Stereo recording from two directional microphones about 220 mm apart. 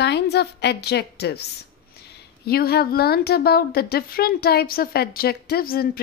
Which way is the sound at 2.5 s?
45° left (ahead or behind).